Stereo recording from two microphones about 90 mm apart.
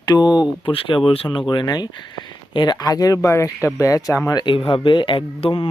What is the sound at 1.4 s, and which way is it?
Speech, 55° left (ahead or behind).